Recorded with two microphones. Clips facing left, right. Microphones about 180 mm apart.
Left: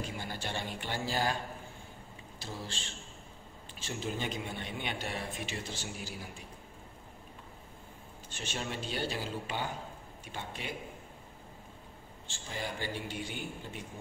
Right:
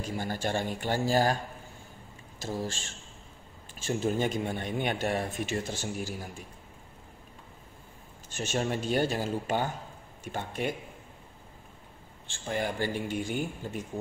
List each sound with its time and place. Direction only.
0.2 s speech: 45° right (ahead or behind)
2.3 s speech: 45° right (ahead or behind)
8.3 s speech: 45° right (ahead or behind)
12.3 s speech: 55° right (ahead or behind)